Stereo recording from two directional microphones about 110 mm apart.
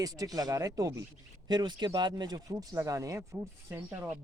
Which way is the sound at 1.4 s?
40° right (ahead or behind).